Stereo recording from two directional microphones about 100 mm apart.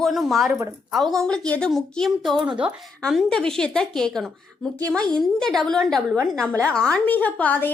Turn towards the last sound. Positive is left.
turn(degrees=15)  # may be behind; listen again after turning